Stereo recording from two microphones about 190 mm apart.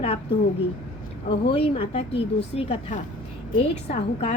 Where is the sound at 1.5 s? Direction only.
30° left (ahead or behind).